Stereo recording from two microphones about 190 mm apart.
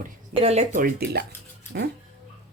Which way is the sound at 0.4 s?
40° right (ahead or behind).